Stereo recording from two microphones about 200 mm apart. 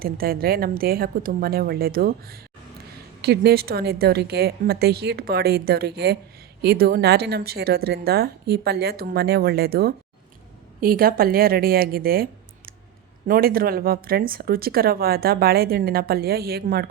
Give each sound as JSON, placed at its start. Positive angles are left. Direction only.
{"t": 0.0, "sound": "speech", "side_deg": -50}